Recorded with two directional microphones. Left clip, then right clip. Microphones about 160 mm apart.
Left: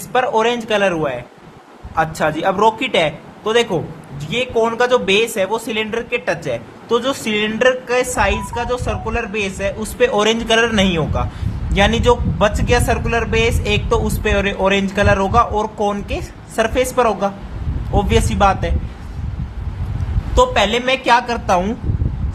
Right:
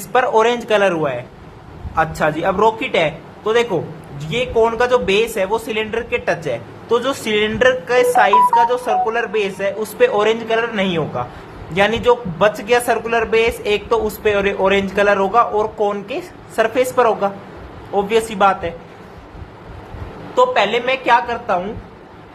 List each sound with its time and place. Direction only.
0.1 s a man's voice: 10° left (ahead or behind); by 10.8 s 30° left (ahead or behind)
10.8 s a man's voice: 20° left (ahead or behind)
20.3 s speech: 30° left (ahead or behind)